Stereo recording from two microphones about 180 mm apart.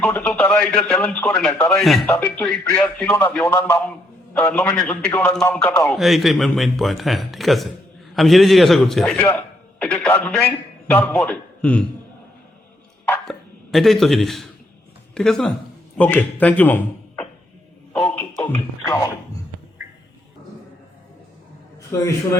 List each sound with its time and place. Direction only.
0.0 s a man's voice: 10° left (ahead or behind)
2.0 s speech: 10° left (ahead or behind)
6.0 s a man's voice: centre (ahead or behind)
13.1 s a sound: centre (ahead or behind)
15.1 s speech: 5° left (ahead or behind)
17.9 s music: centre (ahead or behind)
18.4 s speech: 15° left (ahead or behind)